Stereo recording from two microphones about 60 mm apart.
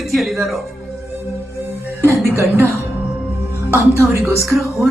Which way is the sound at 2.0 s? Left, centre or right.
Right.